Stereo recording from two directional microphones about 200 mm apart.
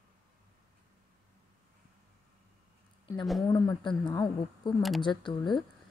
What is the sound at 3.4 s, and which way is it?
A woman's voice, 15° left (ahead or behind).